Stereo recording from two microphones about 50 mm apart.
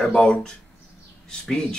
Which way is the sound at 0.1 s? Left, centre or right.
Left.